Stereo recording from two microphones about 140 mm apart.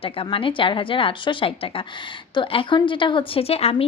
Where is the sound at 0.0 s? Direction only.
40° left (ahead or behind).